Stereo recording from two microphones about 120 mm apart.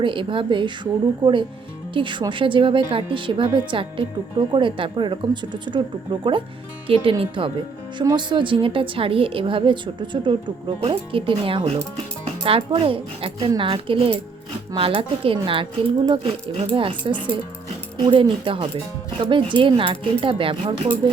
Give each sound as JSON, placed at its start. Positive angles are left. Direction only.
{"t": 0.0, "sound": "a woman's voice", "side_deg": -45}